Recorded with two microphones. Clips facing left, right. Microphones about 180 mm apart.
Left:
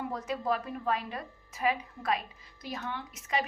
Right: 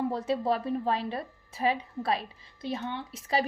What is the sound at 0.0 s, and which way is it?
A woman's voice, 30° right (ahead or behind).